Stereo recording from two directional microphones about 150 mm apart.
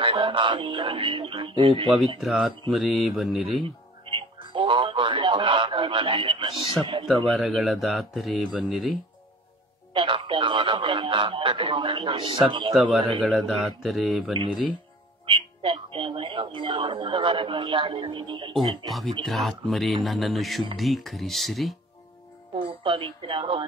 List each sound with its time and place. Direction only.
0.0 s speech: 35° right (ahead or behind)
2.1 s speech: centre (ahead or behind)
3.6 s music: 35° right (ahead or behind)
7.2 s speech: 5° left (ahead or behind)
9.9 s speech: 35° right (ahead or behind)
13.2 s speech: centre (ahead or behind)
15.2 s speech: 35° right (ahead or behind)
19.2 s speech: centre (ahead or behind)
22.6 s speech: 35° right (ahead or behind)